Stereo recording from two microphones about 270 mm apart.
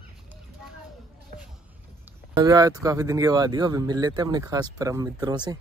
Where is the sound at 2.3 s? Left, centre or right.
Centre.